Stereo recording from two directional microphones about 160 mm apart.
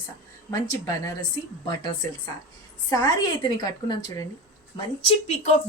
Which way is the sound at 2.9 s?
25° left (ahead or behind).